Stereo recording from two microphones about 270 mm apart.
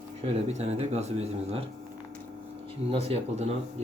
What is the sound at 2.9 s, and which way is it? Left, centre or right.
Speech, right.